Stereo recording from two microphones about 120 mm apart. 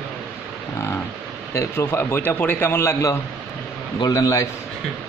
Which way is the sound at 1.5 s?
25° left (ahead or behind).